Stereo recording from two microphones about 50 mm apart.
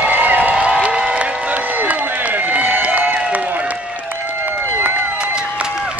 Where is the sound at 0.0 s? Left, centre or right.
Right.